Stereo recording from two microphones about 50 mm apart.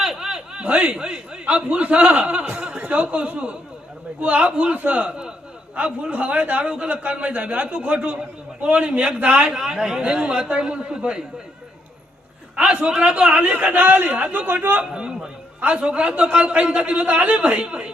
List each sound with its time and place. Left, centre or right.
0.0 s a sound: centre; by 0.9 s right
0.9 s a man's voice: centre
9.5 s a man's voice: centre
12.5 s a man's voice: right
13.5 s a man's voice: right
14.9 s a man's voice: centre